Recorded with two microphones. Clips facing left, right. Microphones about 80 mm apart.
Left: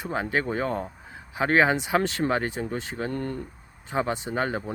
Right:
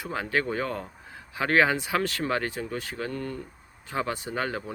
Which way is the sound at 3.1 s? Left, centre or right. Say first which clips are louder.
Left 5 dB; left.